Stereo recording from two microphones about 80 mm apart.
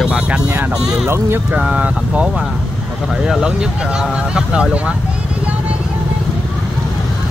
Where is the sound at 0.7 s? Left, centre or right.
Centre.